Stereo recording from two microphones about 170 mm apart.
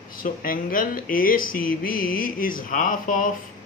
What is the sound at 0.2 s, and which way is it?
Speech, 55° left (ahead or behind).